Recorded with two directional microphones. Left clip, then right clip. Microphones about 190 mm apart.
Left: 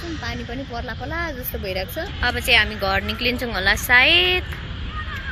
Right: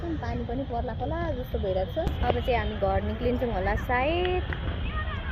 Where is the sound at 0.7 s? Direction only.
35° left (ahead or behind).